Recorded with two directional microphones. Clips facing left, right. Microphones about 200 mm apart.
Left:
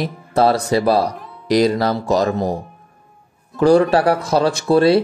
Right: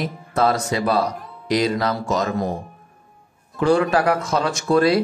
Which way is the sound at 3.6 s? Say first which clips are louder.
Left 5 dB; 40° left (ahead or behind).